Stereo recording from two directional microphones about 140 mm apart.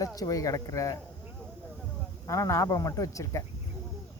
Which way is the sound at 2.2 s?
20° left (ahead or behind).